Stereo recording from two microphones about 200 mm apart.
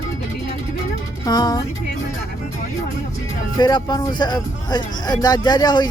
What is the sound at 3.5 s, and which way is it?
Speech, 20° left (ahead or behind).